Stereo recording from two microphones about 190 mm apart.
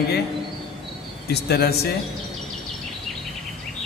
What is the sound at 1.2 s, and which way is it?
Speech, 60° left (ahead or behind).